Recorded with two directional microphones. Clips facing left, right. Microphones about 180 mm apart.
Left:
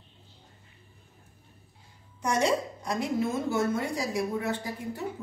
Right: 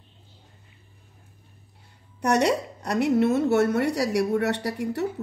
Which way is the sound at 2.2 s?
70° right (ahead or behind).